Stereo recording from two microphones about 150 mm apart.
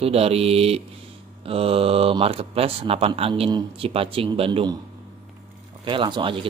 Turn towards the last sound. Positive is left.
turn(degrees=-35)  # may be behind; listen again after turning